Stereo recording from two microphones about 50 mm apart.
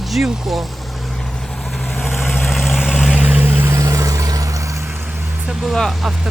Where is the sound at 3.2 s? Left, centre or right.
Right.